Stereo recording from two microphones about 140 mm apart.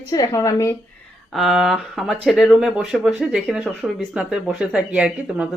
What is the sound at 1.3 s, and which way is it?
Speech, centre (ahead or behind).